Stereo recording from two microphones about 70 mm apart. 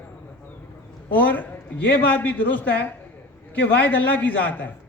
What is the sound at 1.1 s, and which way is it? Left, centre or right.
A man's voice, left.